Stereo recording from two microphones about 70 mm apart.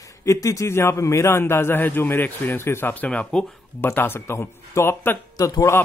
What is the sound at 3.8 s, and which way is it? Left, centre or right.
A man's voice, left.